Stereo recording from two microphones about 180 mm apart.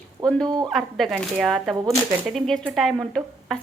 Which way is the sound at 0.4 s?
20° right (ahead or behind).